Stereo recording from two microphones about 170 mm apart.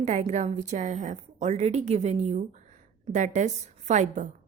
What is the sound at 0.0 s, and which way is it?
A woman's voice, 45° right (ahead or behind).